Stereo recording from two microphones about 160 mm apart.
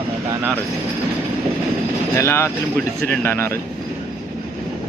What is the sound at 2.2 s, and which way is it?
Speech, 15° left (ahead or behind).